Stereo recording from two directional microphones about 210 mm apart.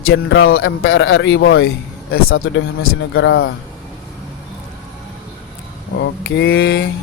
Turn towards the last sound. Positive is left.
turn(degrees=60)  # may be behind; listen again after turning